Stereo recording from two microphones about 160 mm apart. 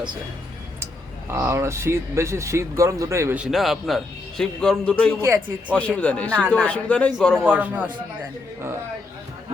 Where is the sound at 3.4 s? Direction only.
Centre (ahead or behind).